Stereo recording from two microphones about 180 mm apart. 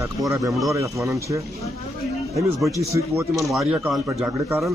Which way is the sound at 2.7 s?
15° right (ahead or behind).